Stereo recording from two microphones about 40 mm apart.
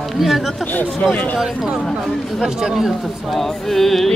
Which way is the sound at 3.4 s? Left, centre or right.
Centre.